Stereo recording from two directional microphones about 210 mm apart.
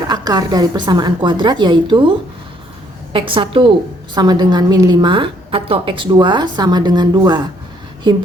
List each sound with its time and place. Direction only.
0.1 s a woman's voice: 20° right (ahead or behind)